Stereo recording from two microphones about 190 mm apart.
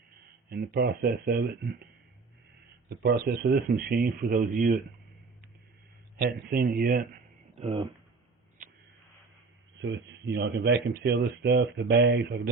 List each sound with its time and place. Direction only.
0.5 s speech: 55° right (ahead or behind)
3.2 s speech: 55° right (ahead or behind)
6.1 s speech: 55° right (ahead or behind)
7.6 s speech: 30° right (ahead or behind)
9.8 s speech: 70° right (ahead or behind)